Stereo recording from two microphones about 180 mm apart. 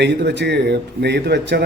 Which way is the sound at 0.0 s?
70° right (ahead or behind).